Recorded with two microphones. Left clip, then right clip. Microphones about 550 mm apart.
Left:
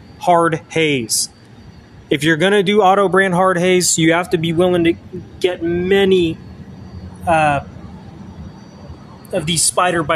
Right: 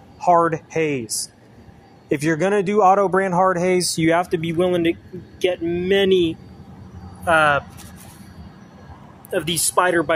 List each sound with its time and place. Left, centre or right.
0.2 s speech: right
9.3 s speech: right